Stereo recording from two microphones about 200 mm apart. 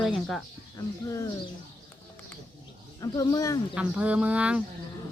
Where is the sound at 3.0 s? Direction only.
20° left (ahead or behind).